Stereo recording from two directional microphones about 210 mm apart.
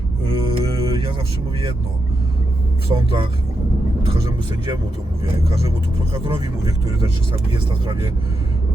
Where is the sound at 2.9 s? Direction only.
25° right (ahead or behind).